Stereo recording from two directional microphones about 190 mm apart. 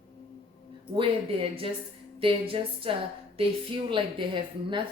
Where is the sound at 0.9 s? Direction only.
30° right (ahead or behind).